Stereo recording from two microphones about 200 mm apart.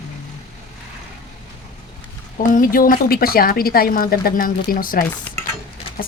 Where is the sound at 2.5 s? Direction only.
45° left (ahead or behind).